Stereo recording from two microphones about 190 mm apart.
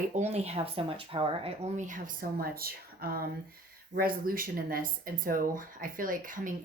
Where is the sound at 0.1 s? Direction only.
35° right (ahead or behind).